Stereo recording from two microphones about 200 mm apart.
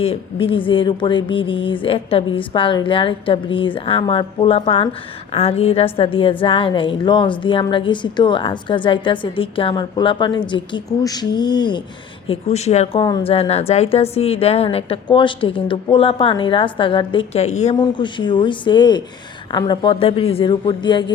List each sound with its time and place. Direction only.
0.0 s a woman's voice: 30° left (ahead or behind)
12.3 s a woman's voice: 30° left (ahead or behind)
17.7 s a woman's voice: 25° left (ahead or behind)